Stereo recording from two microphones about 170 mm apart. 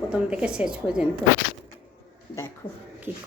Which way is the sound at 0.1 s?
5° right (ahead or behind).